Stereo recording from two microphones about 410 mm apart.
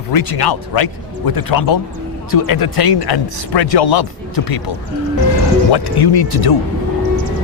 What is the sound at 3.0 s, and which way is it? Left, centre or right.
A man's voice, left.